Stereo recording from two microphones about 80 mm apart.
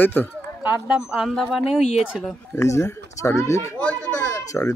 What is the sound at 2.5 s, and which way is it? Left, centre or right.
Speech, left.